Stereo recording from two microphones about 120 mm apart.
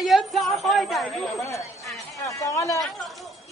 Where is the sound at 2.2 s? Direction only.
25° left (ahead or behind).